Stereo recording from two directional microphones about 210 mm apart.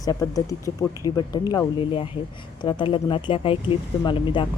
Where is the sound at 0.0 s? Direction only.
15° left (ahead or behind).